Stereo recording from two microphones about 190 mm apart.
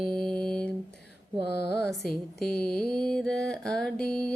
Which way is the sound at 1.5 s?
60° left (ahead or behind).